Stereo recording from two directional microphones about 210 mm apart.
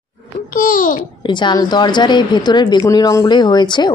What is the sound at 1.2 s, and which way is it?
A woman's voice, 20° left (ahead or behind).